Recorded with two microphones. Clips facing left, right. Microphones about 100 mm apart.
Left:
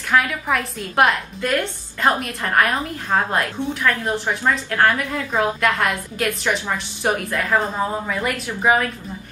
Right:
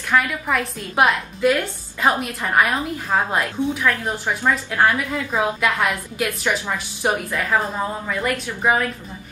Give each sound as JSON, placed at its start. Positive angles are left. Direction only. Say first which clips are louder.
{"t": 0.1, "sound": "a woman's voice", "louder": "left 1 dB", "side_deg": 0}